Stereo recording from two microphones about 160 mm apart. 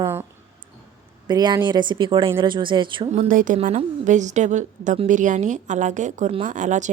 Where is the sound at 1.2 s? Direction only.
25° right (ahead or behind).